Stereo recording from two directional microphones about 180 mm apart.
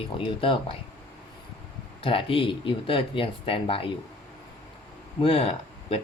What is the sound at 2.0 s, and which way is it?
Speech, 30° left (ahead or behind).